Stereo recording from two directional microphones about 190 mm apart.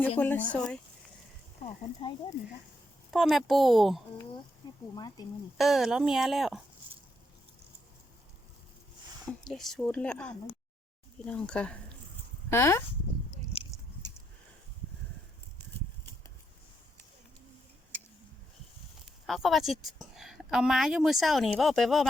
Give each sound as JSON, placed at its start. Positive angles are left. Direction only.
{"t": 0.2, "sound": "a woman's voice", "side_deg": 10}
{"t": 1.6, "sound": "speech", "side_deg": 25}
{"t": 3.1, "sound": "a woman's voice", "side_deg": 0}
{"t": 4.9, "sound": "speech", "side_deg": 20}
{"t": 5.5, "sound": "a woman's voice", "side_deg": 0}
{"t": 9.2, "sound": "a woman's voice", "side_deg": 0}
{"t": 13.5, "sound": "a sound", "side_deg": 30}
{"t": 19.3, "sound": "a woman's voice", "side_deg": 0}